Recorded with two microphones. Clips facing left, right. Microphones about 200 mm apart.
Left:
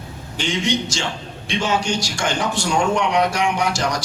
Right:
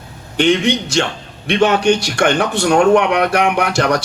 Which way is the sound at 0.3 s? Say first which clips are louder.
Right 8 dB; 60° right (ahead or behind).